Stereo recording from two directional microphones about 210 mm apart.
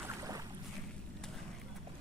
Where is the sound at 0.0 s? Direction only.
15° right (ahead or behind).